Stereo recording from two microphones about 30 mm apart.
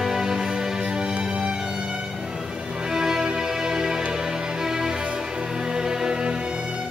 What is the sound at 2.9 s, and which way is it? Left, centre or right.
Music, centre.